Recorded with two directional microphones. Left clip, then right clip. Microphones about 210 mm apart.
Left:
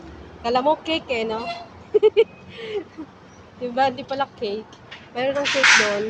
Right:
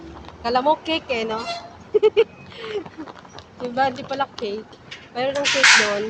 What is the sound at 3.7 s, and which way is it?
Speech, centre (ahead or behind).